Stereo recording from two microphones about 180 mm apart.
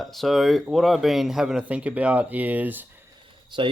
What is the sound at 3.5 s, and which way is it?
Speech, 25° right (ahead or behind).